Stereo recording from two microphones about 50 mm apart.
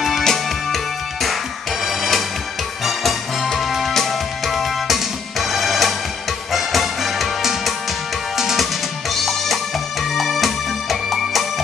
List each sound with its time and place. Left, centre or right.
0.2 s music: centre
1.9 s music: centre